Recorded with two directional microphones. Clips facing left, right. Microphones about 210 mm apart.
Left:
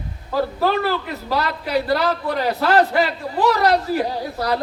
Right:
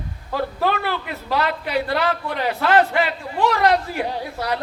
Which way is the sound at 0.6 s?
40° left (ahead or behind).